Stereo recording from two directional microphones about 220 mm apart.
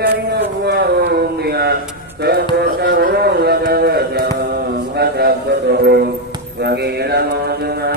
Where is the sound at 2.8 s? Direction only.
50° right (ahead or behind).